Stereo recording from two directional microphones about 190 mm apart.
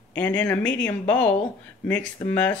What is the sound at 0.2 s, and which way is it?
Speech, 10° left (ahead or behind).